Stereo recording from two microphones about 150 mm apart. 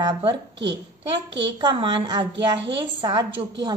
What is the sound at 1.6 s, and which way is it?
A woman's voice, 35° right (ahead or behind).